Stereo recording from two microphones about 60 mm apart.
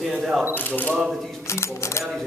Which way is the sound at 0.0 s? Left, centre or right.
Centre.